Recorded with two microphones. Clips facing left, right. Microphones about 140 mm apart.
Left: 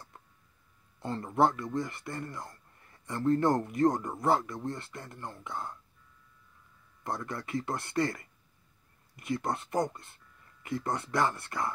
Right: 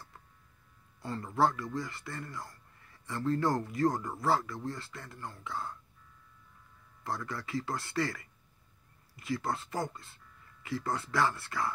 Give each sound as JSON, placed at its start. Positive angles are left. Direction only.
{"t": 0.9, "sound": "speech", "side_deg": 25}
{"t": 7.0, "sound": "speech", "side_deg": 20}
{"t": 9.2, "sound": "speech", "side_deg": 20}